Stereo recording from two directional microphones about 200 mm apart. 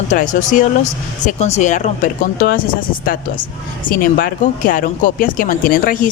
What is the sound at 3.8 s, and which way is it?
Speech, 45° left (ahead or behind).